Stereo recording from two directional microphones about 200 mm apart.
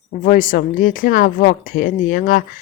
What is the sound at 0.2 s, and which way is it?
Speech, 45° left (ahead or behind).